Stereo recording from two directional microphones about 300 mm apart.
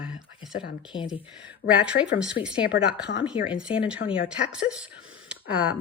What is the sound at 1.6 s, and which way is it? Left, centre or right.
Speech, left.